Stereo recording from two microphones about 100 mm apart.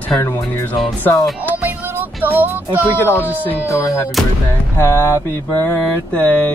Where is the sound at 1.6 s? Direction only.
20° right (ahead or behind).